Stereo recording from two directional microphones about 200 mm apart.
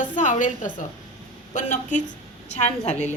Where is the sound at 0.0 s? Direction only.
40° left (ahead or behind).